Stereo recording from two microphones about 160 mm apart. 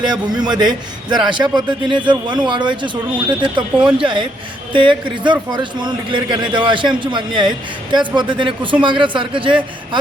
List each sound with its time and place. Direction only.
0.1 s a man's voice: 25° right (ahead or behind)